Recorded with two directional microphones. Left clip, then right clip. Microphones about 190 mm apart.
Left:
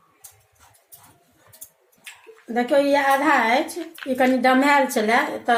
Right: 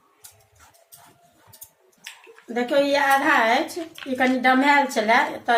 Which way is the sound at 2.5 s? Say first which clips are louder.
Left 2 dB; 50° left (ahead or behind).